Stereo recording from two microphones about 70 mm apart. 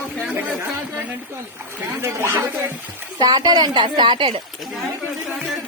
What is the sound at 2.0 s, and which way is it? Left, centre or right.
Speech, right.